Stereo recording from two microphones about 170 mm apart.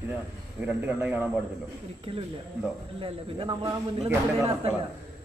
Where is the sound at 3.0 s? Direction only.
30° right (ahead or behind).